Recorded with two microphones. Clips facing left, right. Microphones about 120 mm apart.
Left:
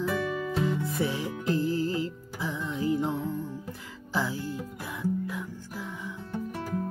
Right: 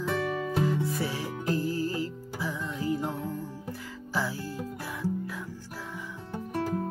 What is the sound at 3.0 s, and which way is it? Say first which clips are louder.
Music: left 3 dB; centre (ahead or behind).